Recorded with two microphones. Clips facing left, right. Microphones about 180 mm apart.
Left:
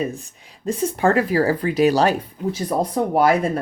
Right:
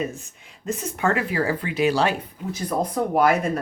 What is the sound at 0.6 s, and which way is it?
Speech, 30° left (ahead or behind).